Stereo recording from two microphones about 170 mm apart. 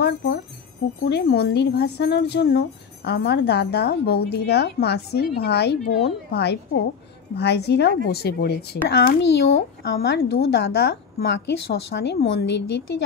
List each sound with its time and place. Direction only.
1.0 s speech: 75° left (ahead or behind)